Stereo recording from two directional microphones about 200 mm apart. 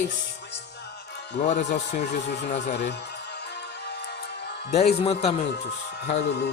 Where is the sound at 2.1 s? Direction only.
55° left (ahead or behind).